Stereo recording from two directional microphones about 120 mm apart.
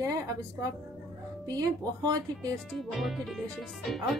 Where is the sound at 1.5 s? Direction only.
30° right (ahead or behind).